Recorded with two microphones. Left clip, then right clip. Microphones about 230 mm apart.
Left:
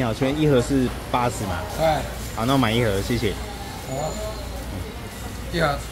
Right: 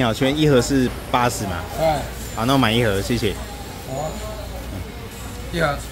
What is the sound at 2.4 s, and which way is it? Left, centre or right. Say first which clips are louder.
Speech: right 3 dB; centre.